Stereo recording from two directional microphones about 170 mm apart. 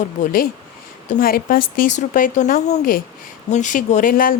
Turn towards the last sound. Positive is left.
turn(degrees=55)  # may be behind; listen again after turning